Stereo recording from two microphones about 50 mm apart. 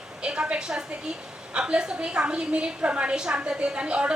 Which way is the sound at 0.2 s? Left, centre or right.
Right.